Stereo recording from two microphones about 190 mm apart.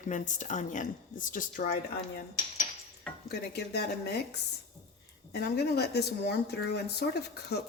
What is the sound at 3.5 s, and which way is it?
Speech, 60° left (ahead or behind).